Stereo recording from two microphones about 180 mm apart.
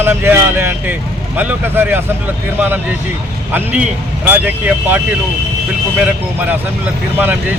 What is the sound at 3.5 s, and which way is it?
Speech, 10° right (ahead or behind).